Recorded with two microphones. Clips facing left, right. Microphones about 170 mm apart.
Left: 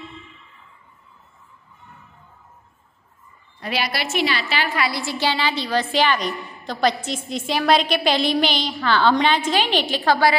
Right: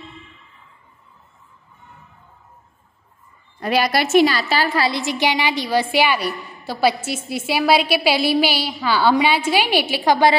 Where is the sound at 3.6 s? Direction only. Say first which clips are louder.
Right 7 dB; 45° right (ahead or behind).